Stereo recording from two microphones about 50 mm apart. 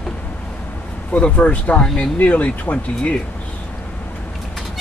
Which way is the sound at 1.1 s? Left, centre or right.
Left.